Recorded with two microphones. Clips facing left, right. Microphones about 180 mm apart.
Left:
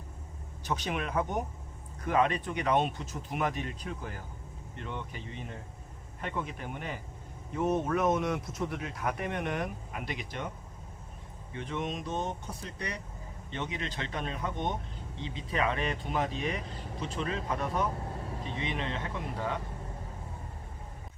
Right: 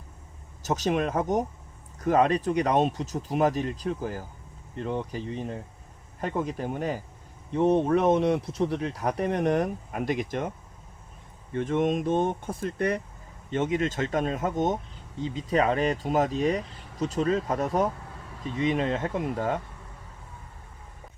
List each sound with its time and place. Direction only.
0.6 s speech: 40° right (ahead or behind)
11.5 s speech: 50° right (ahead or behind)
17.9 s vehicle: 35° left (ahead or behind)
18.6 s speech: 40° right (ahead or behind)